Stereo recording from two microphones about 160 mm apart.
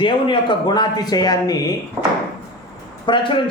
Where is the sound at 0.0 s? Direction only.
30° left (ahead or behind).